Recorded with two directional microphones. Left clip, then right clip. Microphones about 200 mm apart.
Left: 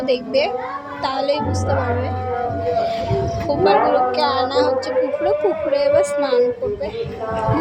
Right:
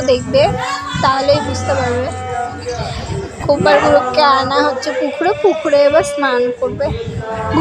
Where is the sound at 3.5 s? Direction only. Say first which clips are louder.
Right 5 dB; 15° right (ahead or behind).